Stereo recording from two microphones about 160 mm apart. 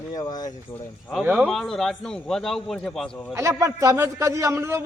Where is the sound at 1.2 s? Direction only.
10° right (ahead or behind).